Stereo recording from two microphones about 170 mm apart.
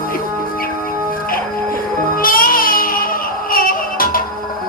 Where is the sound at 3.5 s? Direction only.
55° left (ahead or behind).